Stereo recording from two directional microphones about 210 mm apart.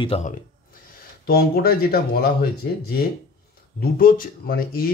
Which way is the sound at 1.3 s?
45° left (ahead or behind).